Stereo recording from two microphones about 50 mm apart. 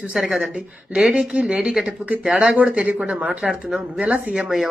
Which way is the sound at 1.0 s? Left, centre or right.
Centre.